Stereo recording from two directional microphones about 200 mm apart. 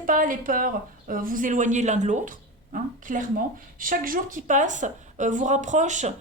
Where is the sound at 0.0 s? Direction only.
40° right (ahead or behind).